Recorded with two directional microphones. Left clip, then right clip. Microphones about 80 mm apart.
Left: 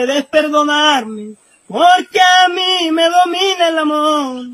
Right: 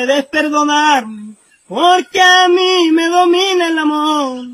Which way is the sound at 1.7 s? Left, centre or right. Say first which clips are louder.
Left 1 dB; left.